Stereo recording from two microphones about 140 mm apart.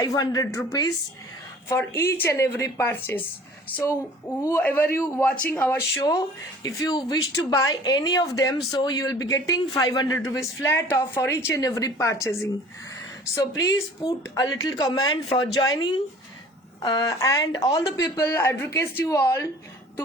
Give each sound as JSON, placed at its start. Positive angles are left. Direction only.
{"t": 0.0, "sound": "a woman's voice", "side_deg": 25}
{"t": 4.4, "sound": "a woman's voice", "side_deg": 15}